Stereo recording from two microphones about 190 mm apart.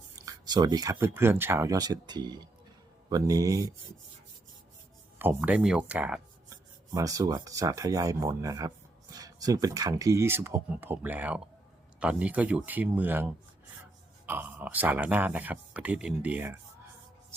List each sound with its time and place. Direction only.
0.2 s speech: 20° right (ahead or behind)
5.2 s speech: 10° right (ahead or behind)
6.9 s speech: 20° right (ahead or behind)